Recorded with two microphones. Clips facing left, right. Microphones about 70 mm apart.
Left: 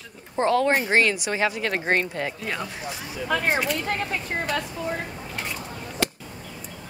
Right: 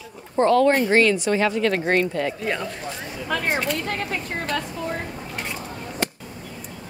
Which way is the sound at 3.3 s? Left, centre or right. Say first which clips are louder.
Even; centre.